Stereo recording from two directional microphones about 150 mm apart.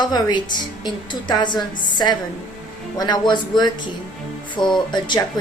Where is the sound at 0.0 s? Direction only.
30° left (ahead or behind).